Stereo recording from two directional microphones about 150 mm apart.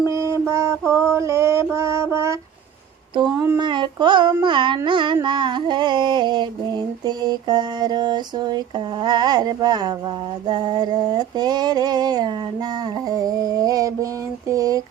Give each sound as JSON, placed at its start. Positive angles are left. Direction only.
{"t": 0.1, "sound": "mantra", "side_deg": -20}
{"t": 3.3, "sound": "speech", "side_deg": -15}
{"t": 3.6, "sound": "child singing", "side_deg": -30}
{"t": 4.4, "sound": "carnatic music", "side_deg": -30}
{"t": 4.9, "sound": "a sound", "side_deg": -35}